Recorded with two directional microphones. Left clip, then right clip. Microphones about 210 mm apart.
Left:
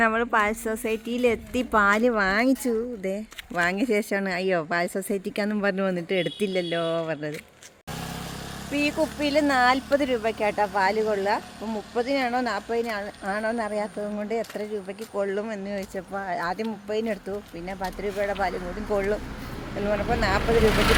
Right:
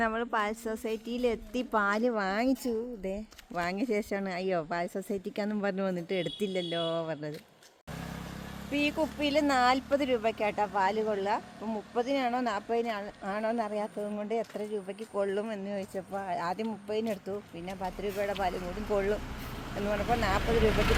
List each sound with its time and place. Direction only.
0.0 s a woman's voice: 5° left (ahead or behind)
8.7 s speech: 25° right (ahead or behind)
18.5 s speech: 45° right (ahead or behind)
20.1 s speech: 15° right (ahead or behind)